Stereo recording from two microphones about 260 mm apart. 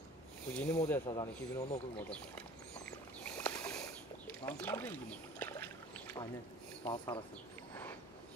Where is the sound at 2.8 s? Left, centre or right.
Centre.